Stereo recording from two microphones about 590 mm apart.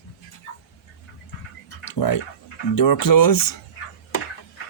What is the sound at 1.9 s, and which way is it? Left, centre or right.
Speech, left.